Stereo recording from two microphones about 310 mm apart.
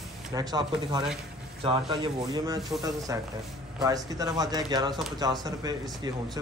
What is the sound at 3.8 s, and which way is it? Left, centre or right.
A man's voice, centre.